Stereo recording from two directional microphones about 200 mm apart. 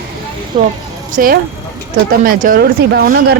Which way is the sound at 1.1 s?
45° right (ahead or behind).